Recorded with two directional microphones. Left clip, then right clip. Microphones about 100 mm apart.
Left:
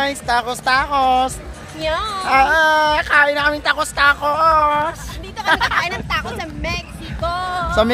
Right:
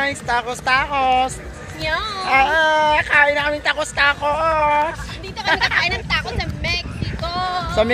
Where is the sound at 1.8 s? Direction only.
60° left (ahead or behind).